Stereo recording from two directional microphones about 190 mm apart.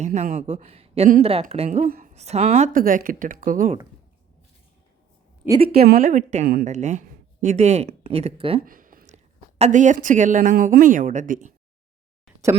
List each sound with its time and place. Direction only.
0.0 s speech: 40° right (ahead or behind)
1.9 s speech: 45° right (ahead or behind)
5.6 s speech: 55° right (ahead or behind); by 8.6 s 30° right (ahead or behind)
8.6 s speech: 45° right (ahead or behind)